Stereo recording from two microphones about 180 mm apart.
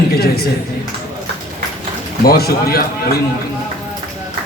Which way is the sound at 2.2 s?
60° left (ahead or behind).